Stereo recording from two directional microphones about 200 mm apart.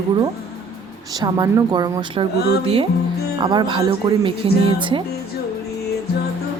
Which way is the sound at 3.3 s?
20° right (ahead or behind).